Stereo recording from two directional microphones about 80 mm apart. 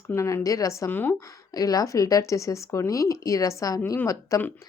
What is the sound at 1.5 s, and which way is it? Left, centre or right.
Speech, left.